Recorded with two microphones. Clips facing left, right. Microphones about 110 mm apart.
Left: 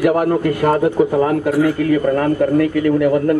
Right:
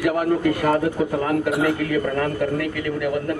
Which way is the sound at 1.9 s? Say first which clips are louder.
Left 7 dB; 30° left (ahead or behind).